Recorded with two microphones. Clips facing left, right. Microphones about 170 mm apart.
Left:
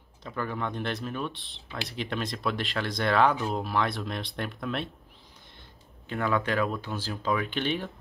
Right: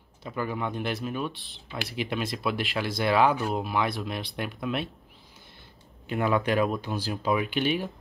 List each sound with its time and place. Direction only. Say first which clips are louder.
0.2 s speech: right 2 dB; 10° right (ahead or behind)
6.0 s speech: right 3 dB; 15° right (ahead or behind)